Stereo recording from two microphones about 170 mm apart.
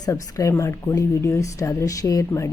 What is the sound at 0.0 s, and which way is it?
Speech, 20° left (ahead or behind).